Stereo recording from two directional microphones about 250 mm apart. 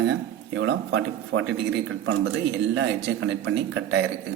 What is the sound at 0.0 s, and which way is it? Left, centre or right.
Speech, right.